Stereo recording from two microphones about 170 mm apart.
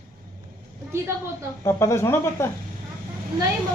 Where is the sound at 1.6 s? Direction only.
15° left (ahead or behind).